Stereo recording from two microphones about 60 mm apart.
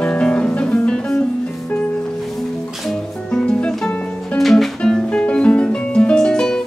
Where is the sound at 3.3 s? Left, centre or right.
Centre.